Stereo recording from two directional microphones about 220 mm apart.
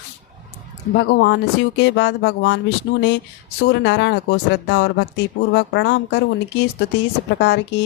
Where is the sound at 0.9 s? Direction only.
50° left (ahead or behind).